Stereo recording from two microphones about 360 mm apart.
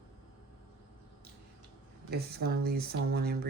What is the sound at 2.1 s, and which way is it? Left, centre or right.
Speech, right.